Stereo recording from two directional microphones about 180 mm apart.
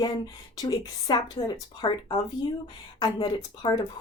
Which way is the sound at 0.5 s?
20° left (ahead or behind).